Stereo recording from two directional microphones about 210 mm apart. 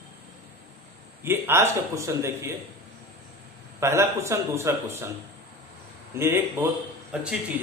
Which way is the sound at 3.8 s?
10° right (ahead or behind).